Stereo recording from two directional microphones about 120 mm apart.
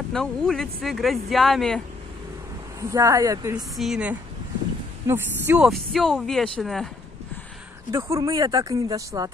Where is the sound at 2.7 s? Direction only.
25° right (ahead or behind).